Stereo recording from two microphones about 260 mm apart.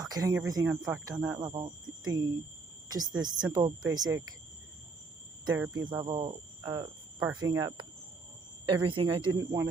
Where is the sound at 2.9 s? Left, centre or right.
Centre.